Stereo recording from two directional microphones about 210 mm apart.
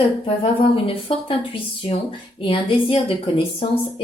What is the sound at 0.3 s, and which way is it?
A woman's voice, 25° left (ahead or behind).